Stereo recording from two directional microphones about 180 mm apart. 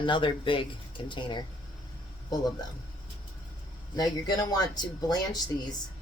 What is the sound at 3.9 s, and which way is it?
Speech, 20° left (ahead or behind).